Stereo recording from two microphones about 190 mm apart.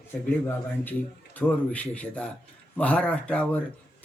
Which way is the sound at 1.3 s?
10° left (ahead or behind).